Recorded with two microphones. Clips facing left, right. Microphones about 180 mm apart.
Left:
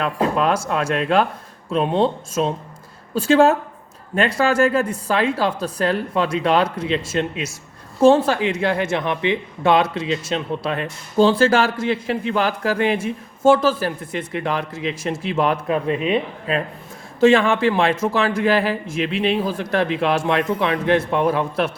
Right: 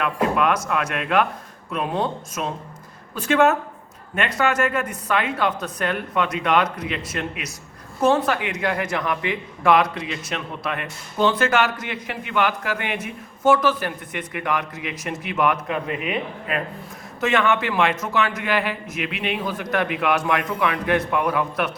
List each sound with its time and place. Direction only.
0.0 s speech: 30° left (ahead or behind)